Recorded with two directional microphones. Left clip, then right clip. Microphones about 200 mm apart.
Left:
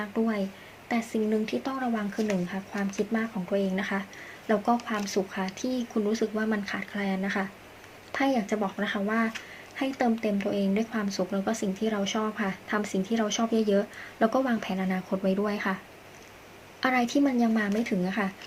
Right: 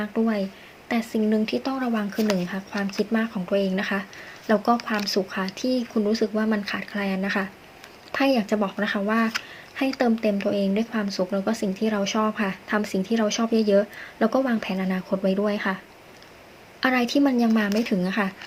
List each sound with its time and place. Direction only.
0.0 s speech: 10° right (ahead or behind)
16.8 s speech: 10° right (ahead or behind)